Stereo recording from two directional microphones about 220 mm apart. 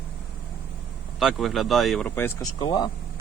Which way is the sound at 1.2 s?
Centre (ahead or behind).